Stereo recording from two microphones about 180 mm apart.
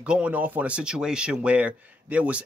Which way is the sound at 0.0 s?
5° right (ahead or behind).